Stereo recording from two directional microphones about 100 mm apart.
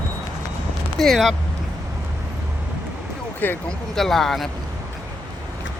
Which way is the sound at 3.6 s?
5° left (ahead or behind).